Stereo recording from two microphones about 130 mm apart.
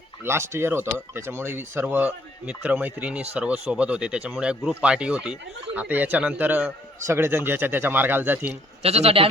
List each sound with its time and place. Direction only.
0.3 s speech: 20° right (ahead or behind)
8.8 s speech: 50° right (ahead or behind)